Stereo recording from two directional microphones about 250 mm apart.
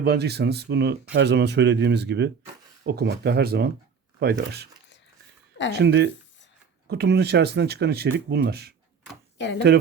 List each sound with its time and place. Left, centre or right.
0.0 s speech: right
5.7 s speech: right